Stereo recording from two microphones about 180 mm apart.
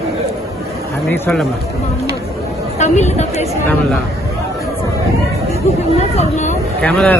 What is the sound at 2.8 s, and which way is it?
Speech, 40° left (ahead or behind).